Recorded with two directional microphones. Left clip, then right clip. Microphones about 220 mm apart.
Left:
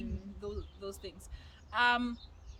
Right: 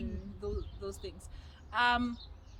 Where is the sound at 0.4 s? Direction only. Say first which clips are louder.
Right 2 dB; 15° left (ahead or behind).